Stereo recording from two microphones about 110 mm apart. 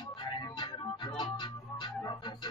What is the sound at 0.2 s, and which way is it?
Music, 45° left (ahead or behind).